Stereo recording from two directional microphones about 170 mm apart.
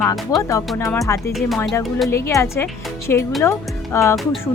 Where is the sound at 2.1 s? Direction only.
15° left (ahead or behind).